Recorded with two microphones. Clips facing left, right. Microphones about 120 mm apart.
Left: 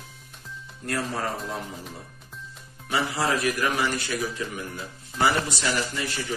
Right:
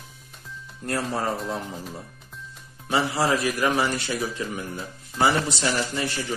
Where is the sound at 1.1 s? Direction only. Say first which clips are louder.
Right 3 dB; 30° right (ahead or behind).